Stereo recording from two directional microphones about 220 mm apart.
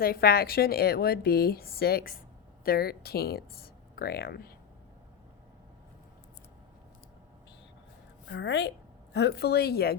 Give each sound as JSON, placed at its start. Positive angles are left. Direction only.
{"t": 0.0, "sound": "a woman's voice", "side_deg": 45}
{"t": 8.3, "sound": "a woman's voice", "side_deg": 55}